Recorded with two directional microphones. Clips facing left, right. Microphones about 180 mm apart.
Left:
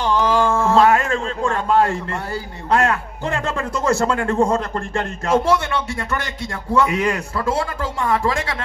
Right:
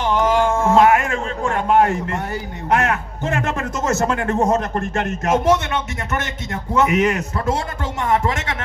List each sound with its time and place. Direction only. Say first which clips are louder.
0.0 s a man's voice: right 1 dB; 15° right (ahead or behind)